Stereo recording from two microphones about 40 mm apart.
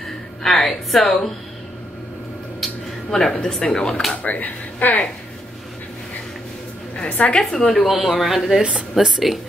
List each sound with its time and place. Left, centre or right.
0.4 s speech: centre
3.1 s speech: centre
4.1 s speech: left
7.0 s a woman's voice: left
7.3 s speech: centre
7.8 s speech: centre